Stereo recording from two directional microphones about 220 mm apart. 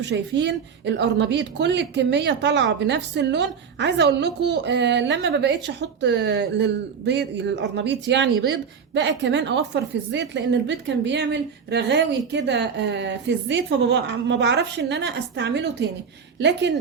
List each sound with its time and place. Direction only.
0.0 s a woman's voice: 55° right (ahead or behind)